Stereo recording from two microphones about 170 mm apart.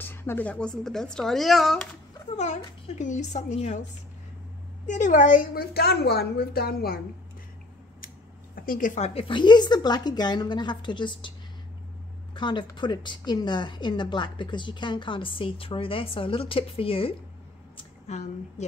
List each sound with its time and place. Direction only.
0.0 s speech: 15° left (ahead or behind)
2.3 s a woman's voice: 40° left (ahead or behind)
4.8 s a woman's voice: 45° left (ahead or behind); by 7.0 s 65° left (ahead or behind)
8.5 s a woman's voice: 55° left (ahead or behind); by 11.3 s 30° left (ahead or behind)
12.4 s a woman's voice: 30° left (ahead or behind)
17.7 s a sound: 40° left (ahead or behind)